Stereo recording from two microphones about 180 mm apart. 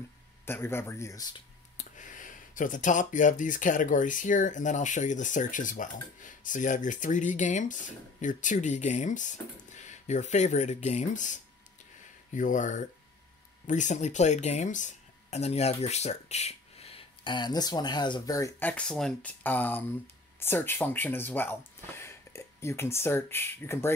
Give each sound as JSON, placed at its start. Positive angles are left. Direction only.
{"t": 0.5, "sound": "speech", "side_deg": 15}
{"t": 1.8, "sound": "speech", "side_deg": 45}
{"t": 12.4, "sound": "speech", "side_deg": 45}